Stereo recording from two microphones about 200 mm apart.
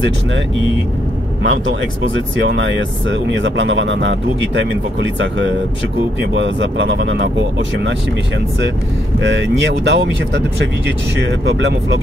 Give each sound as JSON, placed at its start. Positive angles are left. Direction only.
{"t": 1.4, "sound": "speech", "side_deg": -70}
{"t": 9.2, "sound": "speech", "side_deg": -65}